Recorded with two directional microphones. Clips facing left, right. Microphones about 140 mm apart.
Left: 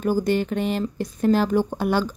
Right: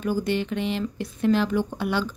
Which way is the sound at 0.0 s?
45° left (ahead or behind).